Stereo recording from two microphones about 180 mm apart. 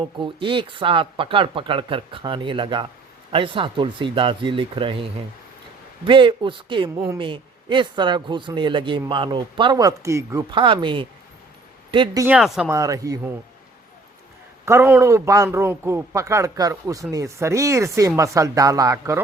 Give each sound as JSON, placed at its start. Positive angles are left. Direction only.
{"t": 0.0, "sound": "speech", "side_deg": -30}
{"t": 6.1, "sound": "speech", "side_deg": -30}
{"t": 10.5, "sound": "speech", "side_deg": -30}
{"t": 12.2, "sound": "speech", "side_deg": -5}
{"t": 12.6, "sound": "speech", "side_deg": -20}
{"t": 14.6, "sound": "a man's voice", "side_deg": -15}